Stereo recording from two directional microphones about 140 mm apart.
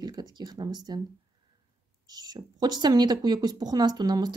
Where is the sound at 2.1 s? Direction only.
30° right (ahead or behind).